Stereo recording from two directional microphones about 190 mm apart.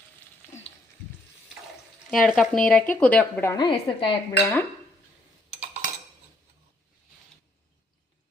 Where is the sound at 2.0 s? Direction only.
Centre (ahead or behind).